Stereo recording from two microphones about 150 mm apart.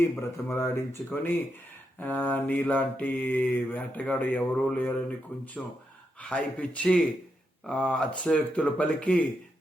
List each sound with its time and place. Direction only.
0.2 s mantra: 15° left (ahead or behind)
5.6 s speech: centre (ahead or behind)
6.2 s mantra: 5° left (ahead or behind)